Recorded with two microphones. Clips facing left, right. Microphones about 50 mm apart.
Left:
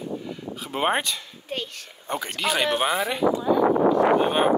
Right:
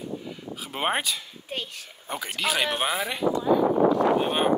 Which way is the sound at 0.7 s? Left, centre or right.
Centre.